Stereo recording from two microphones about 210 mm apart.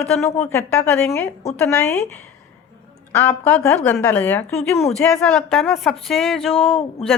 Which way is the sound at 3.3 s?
5° left (ahead or behind).